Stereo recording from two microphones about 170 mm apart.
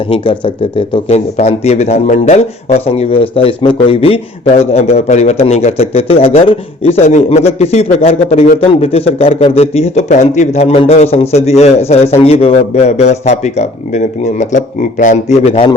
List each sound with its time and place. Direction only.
0.1 s speech: 30° left (ahead or behind)